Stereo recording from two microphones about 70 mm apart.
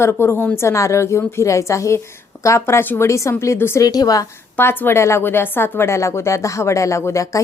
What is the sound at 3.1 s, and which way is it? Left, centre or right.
Speech, left.